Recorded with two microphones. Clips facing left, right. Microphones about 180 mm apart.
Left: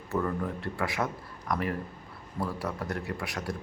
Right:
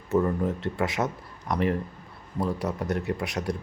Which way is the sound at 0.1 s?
20° right (ahead or behind).